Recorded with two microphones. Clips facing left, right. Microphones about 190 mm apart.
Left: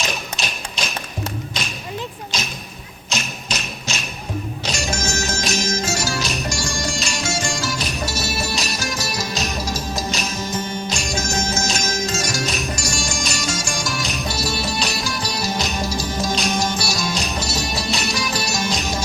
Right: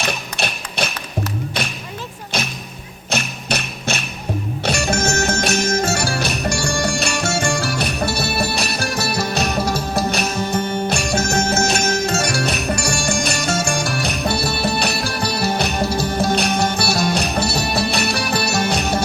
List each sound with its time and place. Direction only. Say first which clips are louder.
0.0 s music: right 3 dB; 60° right (ahead or behind)
2.3 s music: right 4 dB; 60° right (ahead or behind)